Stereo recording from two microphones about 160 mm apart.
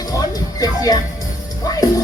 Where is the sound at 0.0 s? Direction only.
20° left (ahead or behind).